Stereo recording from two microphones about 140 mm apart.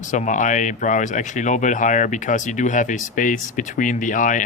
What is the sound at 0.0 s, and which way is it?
Speech, 60° left (ahead or behind).